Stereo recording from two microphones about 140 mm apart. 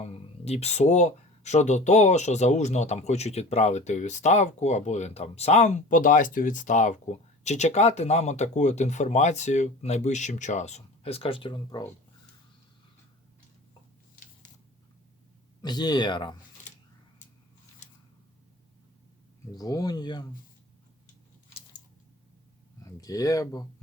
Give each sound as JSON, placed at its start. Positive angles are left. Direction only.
{"t": 0.0, "sound": "speech", "side_deg": 50}
{"t": 15.6, "sound": "speech", "side_deg": 30}
{"t": 19.5, "sound": "speech", "side_deg": 25}
{"t": 22.8, "sound": "speech", "side_deg": 25}